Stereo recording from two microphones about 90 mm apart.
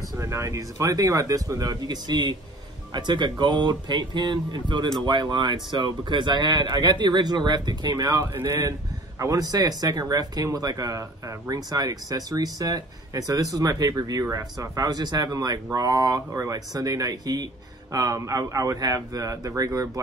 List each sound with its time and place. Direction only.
0.2 s speech: 35° right (ahead or behind)